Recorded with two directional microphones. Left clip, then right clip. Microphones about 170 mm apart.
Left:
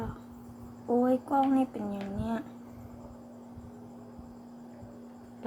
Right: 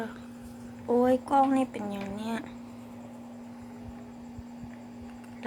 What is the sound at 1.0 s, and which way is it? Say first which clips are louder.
A woman's voice: right 4 dB; 10° left (ahead or behind).